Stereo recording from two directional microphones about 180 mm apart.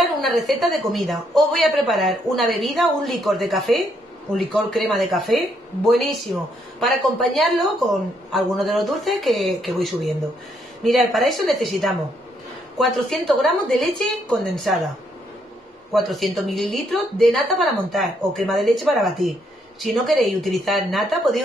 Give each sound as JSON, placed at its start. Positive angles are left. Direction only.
{"t": 0.2, "sound": "a woman's voice", "side_deg": 0}
{"t": 15.9, "sound": "a woman's voice", "side_deg": 0}